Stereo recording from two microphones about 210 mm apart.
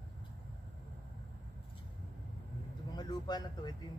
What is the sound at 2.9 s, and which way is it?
Vehicle, 20° left (ahead or behind).